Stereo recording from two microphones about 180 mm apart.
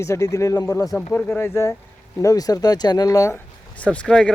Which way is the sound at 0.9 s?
5° left (ahead or behind).